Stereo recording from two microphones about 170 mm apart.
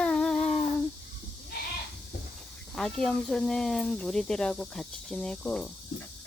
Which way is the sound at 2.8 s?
5° left (ahead or behind).